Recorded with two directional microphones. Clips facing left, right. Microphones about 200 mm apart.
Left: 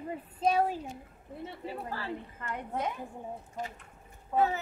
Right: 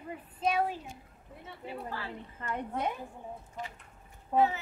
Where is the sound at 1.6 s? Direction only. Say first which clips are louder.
Right 1 dB; 40° left (ahead or behind).